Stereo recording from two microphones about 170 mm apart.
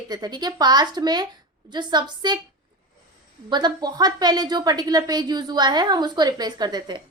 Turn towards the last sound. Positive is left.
turn(degrees=-25)  # may be behind; listen again after turning